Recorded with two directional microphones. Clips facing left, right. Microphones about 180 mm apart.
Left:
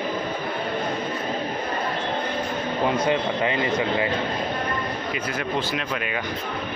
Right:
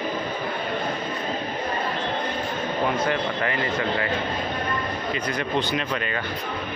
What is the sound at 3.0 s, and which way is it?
Speech, 20° left (ahead or behind).